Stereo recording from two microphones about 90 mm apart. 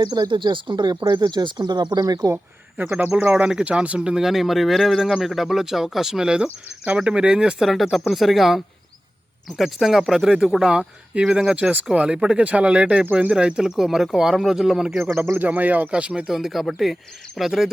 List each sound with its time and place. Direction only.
0.0 s speech: 50° right (ahead or behind)
2.3 s speech: 20° right (ahead or behind)
3.3 s speech: 10° right (ahead or behind)
14.9 s speech: 25° right (ahead or behind); by 17.7 s 5° right (ahead or behind)